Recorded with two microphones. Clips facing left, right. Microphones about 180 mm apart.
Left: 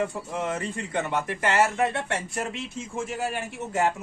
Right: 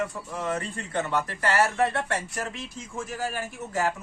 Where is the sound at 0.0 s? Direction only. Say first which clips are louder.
Left 2 dB; 20° left (ahead or behind).